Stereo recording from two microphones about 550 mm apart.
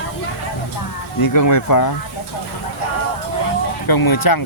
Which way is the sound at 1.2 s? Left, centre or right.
Left.